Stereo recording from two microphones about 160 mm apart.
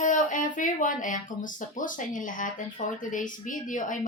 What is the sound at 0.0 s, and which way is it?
Speech, 55° left (ahead or behind).